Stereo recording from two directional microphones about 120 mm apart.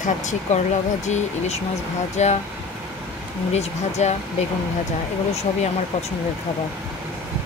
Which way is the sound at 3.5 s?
65° left (ahead or behind).